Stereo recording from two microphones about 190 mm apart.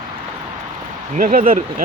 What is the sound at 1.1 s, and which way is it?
Speech, 45° right (ahead or behind).